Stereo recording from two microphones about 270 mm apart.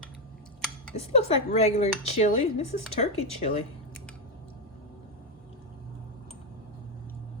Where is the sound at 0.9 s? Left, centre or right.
Left.